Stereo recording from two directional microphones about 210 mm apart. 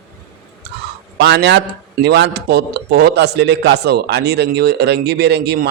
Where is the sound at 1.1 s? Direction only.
55° right (ahead or behind).